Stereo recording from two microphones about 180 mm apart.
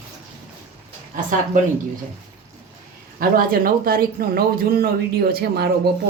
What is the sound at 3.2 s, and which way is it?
Speech, 55° right (ahead or behind).